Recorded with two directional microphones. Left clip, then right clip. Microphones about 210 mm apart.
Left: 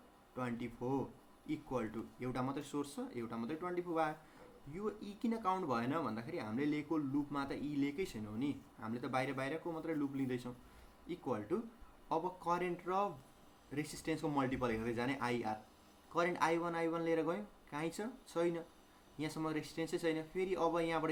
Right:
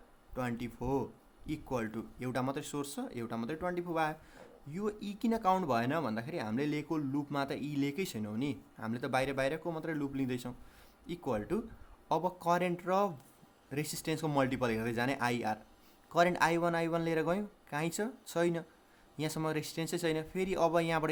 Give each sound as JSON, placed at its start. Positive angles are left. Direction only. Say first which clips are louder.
{"t": 0.3, "sound": "speech", "louder": "right 4 dB", "side_deg": -50}